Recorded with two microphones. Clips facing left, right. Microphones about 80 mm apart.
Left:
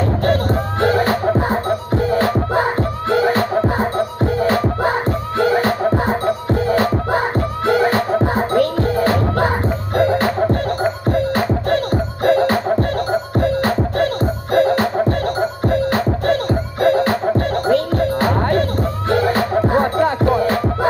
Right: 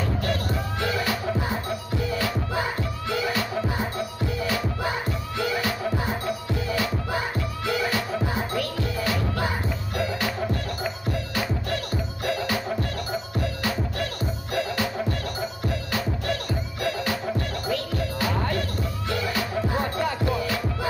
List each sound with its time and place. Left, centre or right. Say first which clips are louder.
0.2 s music: left 10 dB; left